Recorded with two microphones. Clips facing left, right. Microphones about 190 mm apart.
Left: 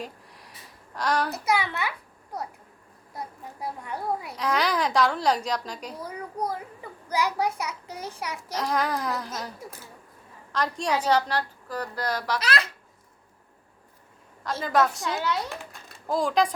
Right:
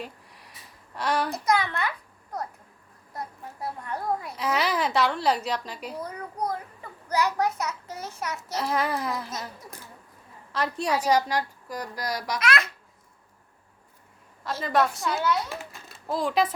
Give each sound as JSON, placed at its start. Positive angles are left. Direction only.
{"t": 0.9, "sound": "a woman's voice", "side_deg": -5}
{"t": 1.3, "sound": "a child's voice", "side_deg": 10}
{"t": 3.6, "sound": "a child's voice", "side_deg": 10}
{"t": 4.4, "sound": "a woman's voice", "side_deg": -5}
{"t": 6.0, "sound": "a child's voice", "side_deg": 10}
{"t": 8.5, "sound": "a woman's voice", "side_deg": -5}
{"t": 10.5, "sound": "a woman's voice", "side_deg": -5}
{"t": 12.4, "sound": "a child's voice", "side_deg": 30}
{"t": 14.6, "sound": "a woman's voice", "side_deg": 0}